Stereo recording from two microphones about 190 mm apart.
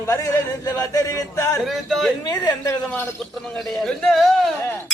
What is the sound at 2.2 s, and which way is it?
Speech, 20° left (ahead or behind).